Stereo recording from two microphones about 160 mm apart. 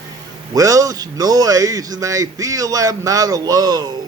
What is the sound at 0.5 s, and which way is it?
Speech, 20° right (ahead or behind).